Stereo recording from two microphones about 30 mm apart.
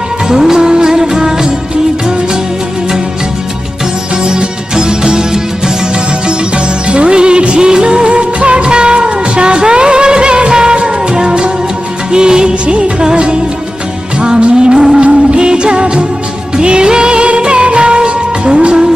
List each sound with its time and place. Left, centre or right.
0.3 s music: centre
4.3 s music: right
6.8 s music: right
12.1 s music of bollywood: right
13.1 s music: right
15.0 s music: right